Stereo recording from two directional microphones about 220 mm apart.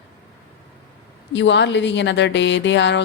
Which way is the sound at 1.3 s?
55° left (ahead or behind).